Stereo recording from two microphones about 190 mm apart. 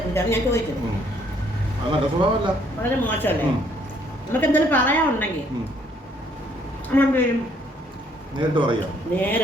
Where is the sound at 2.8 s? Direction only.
10° left (ahead or behind).